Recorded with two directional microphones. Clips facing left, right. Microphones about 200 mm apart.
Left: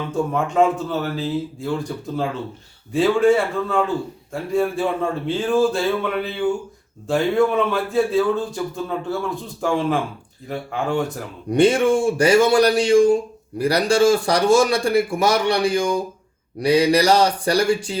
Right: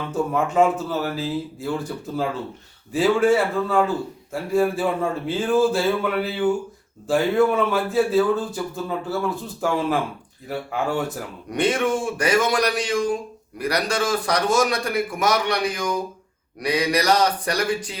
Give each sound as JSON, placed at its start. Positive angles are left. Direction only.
{"t": 0.1, "sound": "speech", "side_deg": -5}
{"t": 11.5, "sound": "a man's voice", "side_deg": 30}